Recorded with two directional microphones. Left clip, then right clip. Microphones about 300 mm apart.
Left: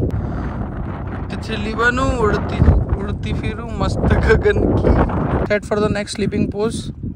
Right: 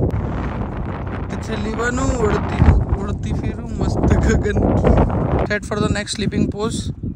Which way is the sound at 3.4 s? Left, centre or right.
Centre.